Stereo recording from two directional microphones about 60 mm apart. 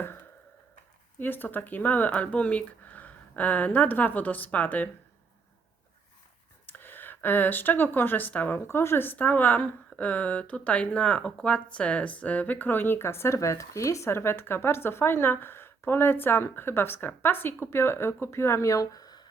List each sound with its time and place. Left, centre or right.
1.2 s speech: left
6.7 s speech: left
8.6 s a woman's voice: left